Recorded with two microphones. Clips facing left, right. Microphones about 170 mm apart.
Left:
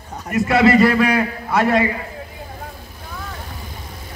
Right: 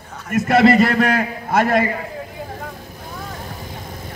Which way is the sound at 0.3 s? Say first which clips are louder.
Right 1 dB; 50° right (ahead or behind).